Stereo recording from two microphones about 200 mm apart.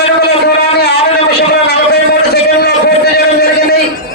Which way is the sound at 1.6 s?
55° left (ahead or behind).